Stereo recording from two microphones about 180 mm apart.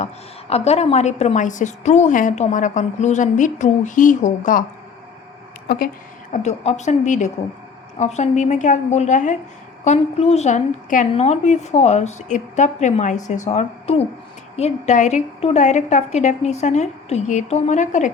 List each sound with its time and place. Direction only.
0.5 s a woman's voice: 35° left (ahead or behind)
6.3 s a woman's voice: 40° left (ahead or behind)